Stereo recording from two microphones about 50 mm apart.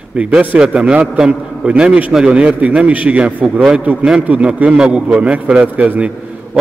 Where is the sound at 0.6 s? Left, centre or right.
Centre; by 4.4 s right.